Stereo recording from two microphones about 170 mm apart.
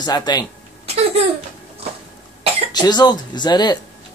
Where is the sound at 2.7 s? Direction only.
25° left (ahead or behind).